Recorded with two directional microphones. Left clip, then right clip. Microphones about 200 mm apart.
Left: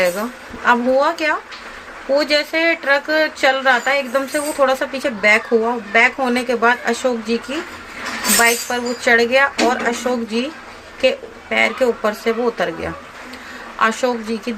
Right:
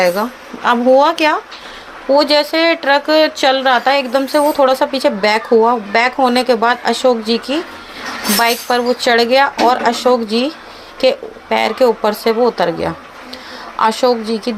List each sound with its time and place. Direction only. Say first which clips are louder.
0.0 s speech: right 4 dB; 25° right (ahead or behind)